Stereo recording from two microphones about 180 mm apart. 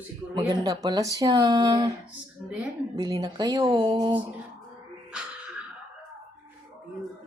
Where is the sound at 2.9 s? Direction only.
20° right (ahead or behind).